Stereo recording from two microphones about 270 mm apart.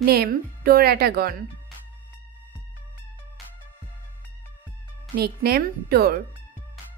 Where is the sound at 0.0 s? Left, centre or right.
Right.